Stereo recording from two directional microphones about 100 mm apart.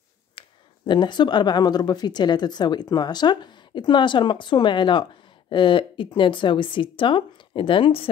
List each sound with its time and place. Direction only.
0.4 s a woman's voice: 50° left (ahead or behind)